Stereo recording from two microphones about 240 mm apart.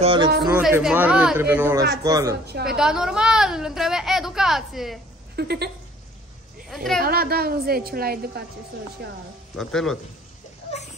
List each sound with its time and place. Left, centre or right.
0.0 s speech: right
0.4 s speech: centre
2.6 s a woman's voice: centre
5.3 s a sound: right
6.7 s a woman's voice: centre
7.0 s a woman's voice: right
9.6 s speech: centre